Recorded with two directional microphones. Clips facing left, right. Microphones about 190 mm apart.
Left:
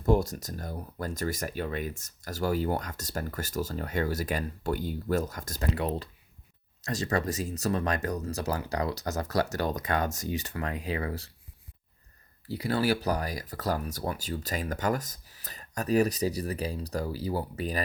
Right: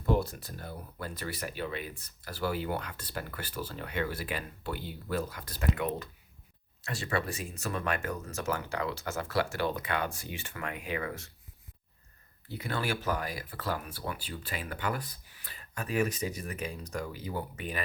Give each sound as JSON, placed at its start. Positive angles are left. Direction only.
{"t": 0.0, "sound": "speech", "side_deg": 40}
{"t": 12.5, "sound": "speech", "side_deg": 35}